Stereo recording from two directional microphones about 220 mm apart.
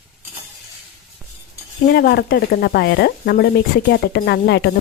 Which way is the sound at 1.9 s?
45° left (ahead or behind).